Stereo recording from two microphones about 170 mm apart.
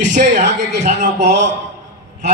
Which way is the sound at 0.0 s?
45° right (ahead or behind).